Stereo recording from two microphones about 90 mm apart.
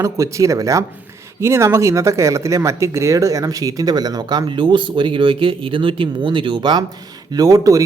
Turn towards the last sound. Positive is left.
turn(degrees=-40)  # may be behind; listen again after turning